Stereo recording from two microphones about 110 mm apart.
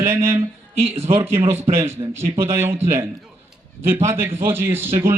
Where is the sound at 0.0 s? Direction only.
25° right (ahead or behind).